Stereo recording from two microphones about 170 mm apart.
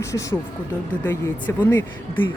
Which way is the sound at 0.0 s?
20° left (ahead or behind).